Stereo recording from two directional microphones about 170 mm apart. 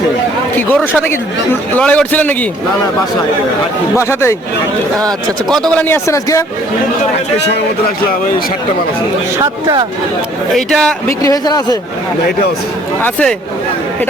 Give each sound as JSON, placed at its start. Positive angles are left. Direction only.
{"t": 0.7, "sound": "a man's voice", "side_deg": 10}
{"t": 3.9, "sound": "a man's voice", "side_deg": 15}
{"t": 5.5, "sound": "a man's voice", "side_deg": 0}
{"t": 5.9, "sound": "a man's voice", "side_deg": 15}
{"t": 9.4, "sound": "speech", "side_deg": -30}
{"t": 10.5, "sound": "a man's voice", "side_deg": 0}
{"t": 11.2, "sound": "speech", "side_deg": 20}
{"t": 13.0, "sound": "a man's voice", "side_deg": 5}